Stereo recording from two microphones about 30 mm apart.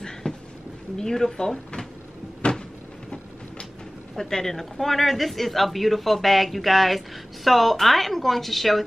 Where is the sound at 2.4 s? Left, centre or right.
Left.